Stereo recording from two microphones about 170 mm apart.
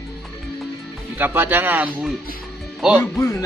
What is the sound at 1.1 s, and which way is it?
Speech, 10° right (ahead or behind).